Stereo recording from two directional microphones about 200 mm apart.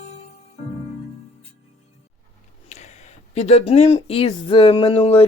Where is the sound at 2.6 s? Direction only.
35° left (ahead or behind).